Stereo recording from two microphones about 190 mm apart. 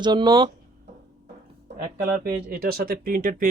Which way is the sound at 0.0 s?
25° right (ahead or behind).